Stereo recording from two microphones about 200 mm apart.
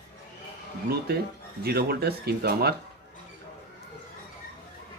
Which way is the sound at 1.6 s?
50° right (ahead or behind).